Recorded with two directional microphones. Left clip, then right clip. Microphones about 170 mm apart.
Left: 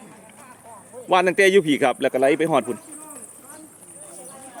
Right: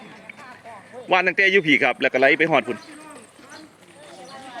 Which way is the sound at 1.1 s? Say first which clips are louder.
Left 1 dB; 15° left (ahead or behind).